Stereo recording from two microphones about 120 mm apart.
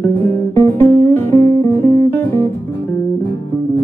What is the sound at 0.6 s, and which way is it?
Music, 20° left (ahead or behind).